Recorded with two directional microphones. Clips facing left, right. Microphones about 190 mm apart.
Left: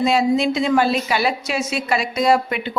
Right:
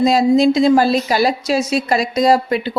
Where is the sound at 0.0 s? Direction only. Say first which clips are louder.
Right 5 dB; 35° right (ahead or behind).